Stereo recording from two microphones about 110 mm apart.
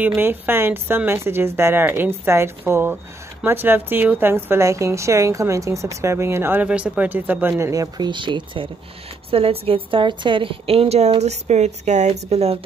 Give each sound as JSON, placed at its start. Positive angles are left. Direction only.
{"t": 0.0, "sound": "a woman's voice", "side_deg": -20}
{"t": 8.1, "sound": "speech", "side_deg": -45}
{"t": 9.3, "sound": "a woman's voice", "side_deg": -60}